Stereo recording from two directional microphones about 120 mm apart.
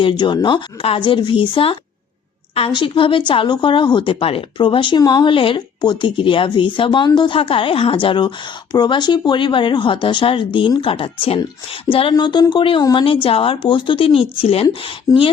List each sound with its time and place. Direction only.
0.0 s a woman's voice: 45° left (ahead or behind)
12.1 s speech: 35° left (ahead or behind)
13.2 s a woman's voice: 50° left (ahead or behind)